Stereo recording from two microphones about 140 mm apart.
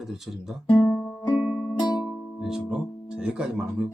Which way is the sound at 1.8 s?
30° left (ahead or behind).